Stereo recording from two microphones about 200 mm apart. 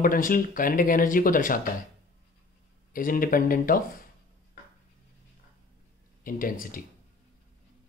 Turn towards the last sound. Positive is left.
turn(degrees=45)  # may be behind; listen again after turning